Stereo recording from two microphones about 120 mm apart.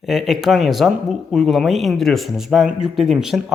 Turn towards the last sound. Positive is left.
turn(degrees=-5)  # may be behind; listen again after turning